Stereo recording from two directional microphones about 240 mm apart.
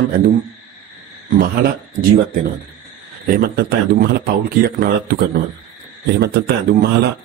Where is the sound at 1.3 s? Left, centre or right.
Right.